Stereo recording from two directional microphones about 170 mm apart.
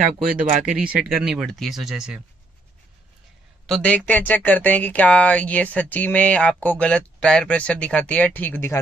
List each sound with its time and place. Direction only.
0.5 s speech: 50° right (ahead or behind)
1.1 s speech: 5° right (ahead or behind)
3.6 s speech: 5° left (ahead or behind)